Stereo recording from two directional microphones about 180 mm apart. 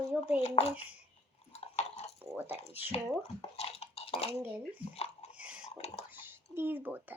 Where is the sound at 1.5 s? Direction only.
35° left (ahead or behind).